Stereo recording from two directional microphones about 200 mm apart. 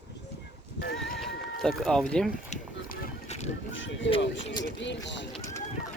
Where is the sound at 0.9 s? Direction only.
Centre (ahead or behind).